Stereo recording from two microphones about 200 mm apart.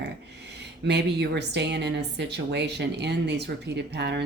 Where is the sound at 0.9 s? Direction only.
60° right (ahead or behind).